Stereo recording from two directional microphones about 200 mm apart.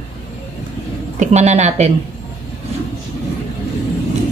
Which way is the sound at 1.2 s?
35° right (ahead or behind).